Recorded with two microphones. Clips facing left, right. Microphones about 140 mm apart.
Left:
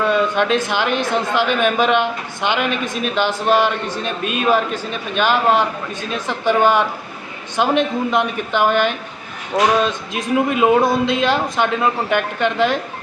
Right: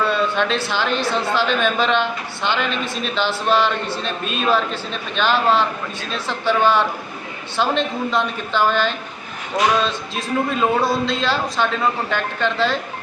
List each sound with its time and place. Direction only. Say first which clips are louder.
0.0 s speech: left 3 dB; 15° left (ahead or behind)